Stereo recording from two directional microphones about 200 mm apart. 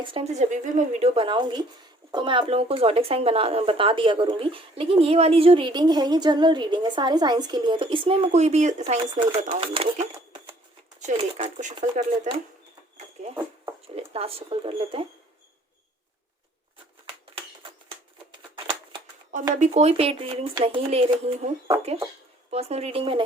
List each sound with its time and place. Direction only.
0.0 s speech: 25° right (ahead or behind)
11.0 s speech: 35° right (ahead or behind)
13.8 s speech: 30° right (ahead or behind)
19.5 s speech: 35° right (ahead or behind)